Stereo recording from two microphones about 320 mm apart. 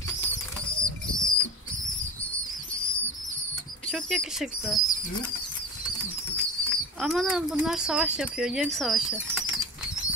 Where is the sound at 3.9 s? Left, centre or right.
Centre.